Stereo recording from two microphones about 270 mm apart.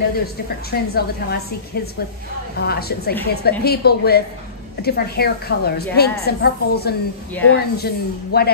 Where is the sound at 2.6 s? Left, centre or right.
Left.